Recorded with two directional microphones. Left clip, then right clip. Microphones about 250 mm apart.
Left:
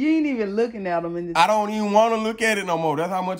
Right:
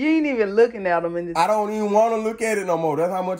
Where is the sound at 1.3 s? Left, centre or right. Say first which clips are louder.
Left 2 dB; left.